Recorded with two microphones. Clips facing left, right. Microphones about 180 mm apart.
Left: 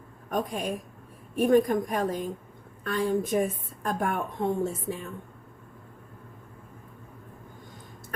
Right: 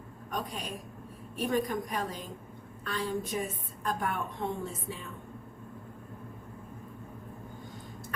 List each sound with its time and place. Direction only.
0.3 s a woman's voice: 50° left (ahead or behind)